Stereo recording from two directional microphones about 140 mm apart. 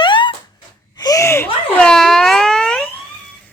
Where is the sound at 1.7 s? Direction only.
5° left (ahead or behind).